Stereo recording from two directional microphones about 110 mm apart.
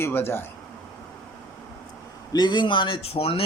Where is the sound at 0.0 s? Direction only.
20° left (ahead or behind).